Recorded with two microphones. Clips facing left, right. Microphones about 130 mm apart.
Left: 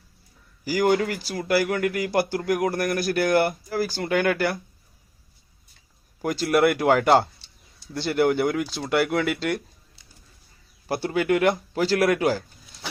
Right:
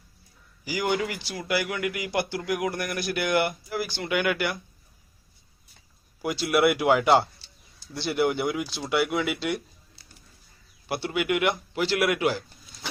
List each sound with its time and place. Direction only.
0.6 s speech: 45° left (ahead or behind)
6.2 s speech: 45° left (ahead or behind)
10.8 s speech: 40° left (ahead or behind)